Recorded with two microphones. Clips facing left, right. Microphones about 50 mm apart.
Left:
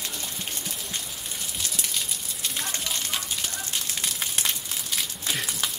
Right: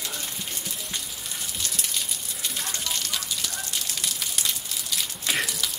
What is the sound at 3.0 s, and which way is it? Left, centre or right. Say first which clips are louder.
Fire: even; left.